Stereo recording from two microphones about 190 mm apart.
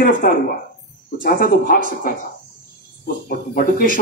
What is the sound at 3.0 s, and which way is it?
Speech, 50° left (ahead or behind).